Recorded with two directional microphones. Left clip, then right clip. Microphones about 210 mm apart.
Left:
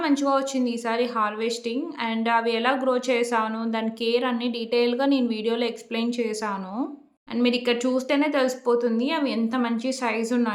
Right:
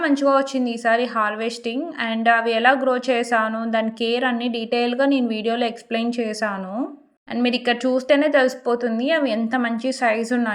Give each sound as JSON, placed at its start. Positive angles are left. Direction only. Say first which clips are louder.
{"t": 0.0, "sound": "a woman's voice", "louder": "right 5 dB", "side_deg": -15}